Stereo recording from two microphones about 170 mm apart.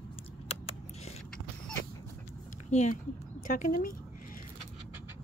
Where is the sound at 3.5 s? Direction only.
55° left (ahead or behind).